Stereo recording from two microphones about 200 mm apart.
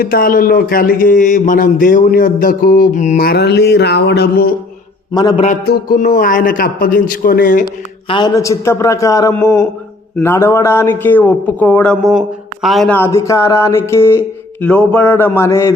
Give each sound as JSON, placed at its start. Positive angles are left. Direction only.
{"t": 0.0, "sound": "a man's voice", "side_deg": 50}
{"t": 5.6, "sound": "a man's voice", "side_deg": 50}
{"t": 8.0, "sound": "music", "side_deg": 25}
{"t": 12.6, "sound": "a man's voice", "side_deg": 0}
{"t": 13.0, "sound": "music", "side_deg": 15}